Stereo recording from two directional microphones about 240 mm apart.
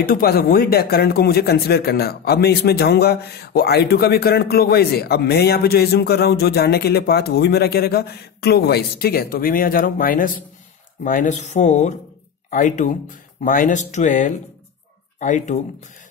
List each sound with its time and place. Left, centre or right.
0.0 s speech: left